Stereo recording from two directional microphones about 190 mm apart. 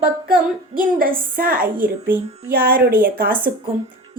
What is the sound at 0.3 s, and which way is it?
A woman's voice, 50° right (ahead or behind).